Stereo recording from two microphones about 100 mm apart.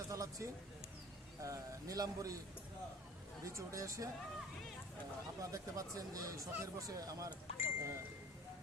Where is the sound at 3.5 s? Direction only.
30° right (ahead or behind).